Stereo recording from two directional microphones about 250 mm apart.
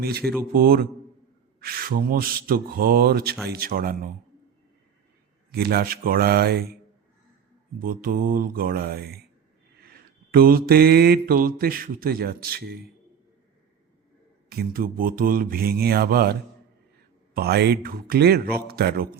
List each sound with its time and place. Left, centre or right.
0.5 s mantra: right
5.5 s mantra: right
7.8 s mantra: right
14.5 s mantra: right